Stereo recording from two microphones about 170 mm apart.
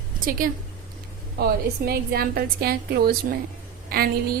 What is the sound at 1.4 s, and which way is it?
A woman's voice, 65° right (ahead or behind).